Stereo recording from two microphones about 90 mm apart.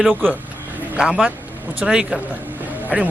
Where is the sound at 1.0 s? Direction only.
10° right (ahead or behind).